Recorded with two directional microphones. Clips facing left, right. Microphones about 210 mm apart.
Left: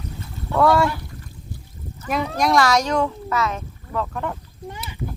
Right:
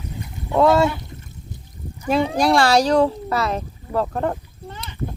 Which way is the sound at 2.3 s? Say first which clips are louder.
Right 1 dB; 30° right (ahead or behind).